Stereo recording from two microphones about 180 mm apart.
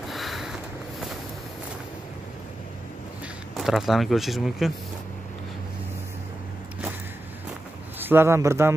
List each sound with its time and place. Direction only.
0.1 s a sound: centre (ahead or behind)
3.5 s speech: centre (ahead or behind)
8.0 s speech: 10° right (ahead or behind)